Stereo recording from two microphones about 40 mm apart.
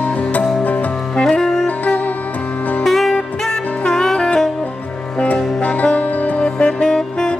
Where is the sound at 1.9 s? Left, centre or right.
Left.